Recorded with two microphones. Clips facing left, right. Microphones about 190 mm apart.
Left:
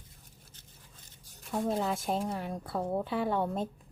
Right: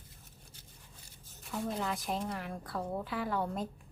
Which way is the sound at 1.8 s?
30° left (ahead or behind).